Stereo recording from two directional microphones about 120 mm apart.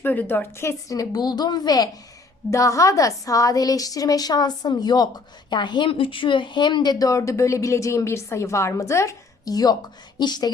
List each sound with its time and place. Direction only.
0.0 s a woman's voice: 15° left (ahead or behind); by 10.5 s 35° left (ahead or behind)